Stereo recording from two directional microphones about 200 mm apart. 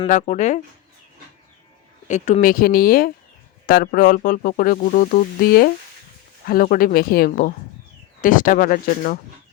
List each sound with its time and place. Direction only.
0.1 s speech: 35° left (ahead or behind)
2.0 s speech: 35° left (ahead or behind)